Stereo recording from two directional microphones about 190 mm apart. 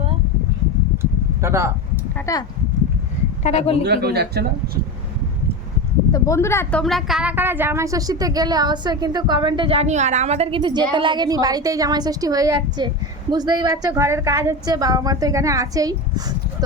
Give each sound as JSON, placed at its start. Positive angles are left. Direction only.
{"t": 1.4, "sound": "speech", "side_deg": -15}
{"t": 2.3, "sound": "speech", "side_deg": 15}
{"t": 3.4, "sound": "a woman's voice", "side_deg": 35}
{"t": 3.8, "sound": "speech", "side_deg": -60}
{"t": 6.1, "sound": "a woman's voice", "side_deg": 15}